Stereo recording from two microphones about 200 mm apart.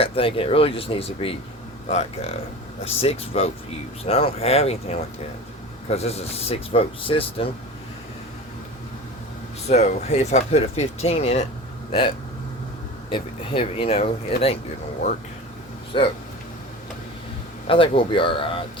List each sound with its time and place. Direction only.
0.0 s speech: 25° left (ahead or behind)
9.6 s speech: 35° left (ahead or behind)
15.9 s speech: 25° left (ahead or behind)
17.7 s speech: 25° left (ahead or behind)